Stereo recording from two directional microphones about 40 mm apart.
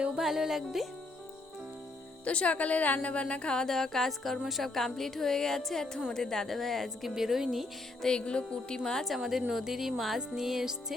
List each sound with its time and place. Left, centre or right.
0.2 s music: centre
2.2 s speech: left
3.7 s a woman's voice: centre
4.7 s a woman's voice: centre
7.1 s music: centre
8.2 s speech: left
8.8 s a woman's voice: centre
9.0 s a woman's voice: centre
9.5 s music: centre